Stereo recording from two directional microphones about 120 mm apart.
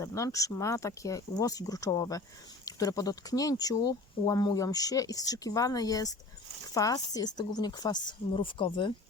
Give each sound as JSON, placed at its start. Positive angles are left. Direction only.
{"t": 0.0, "sound": "speech", "side_deg": 25}